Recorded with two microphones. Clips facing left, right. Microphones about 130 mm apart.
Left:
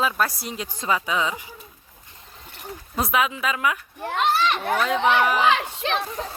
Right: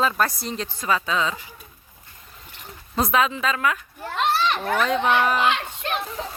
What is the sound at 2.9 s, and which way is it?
Speech, 5° left (ahead or behind).